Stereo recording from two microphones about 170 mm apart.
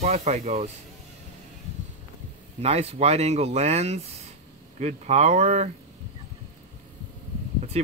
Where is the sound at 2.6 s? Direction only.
40° right (ahead or behind).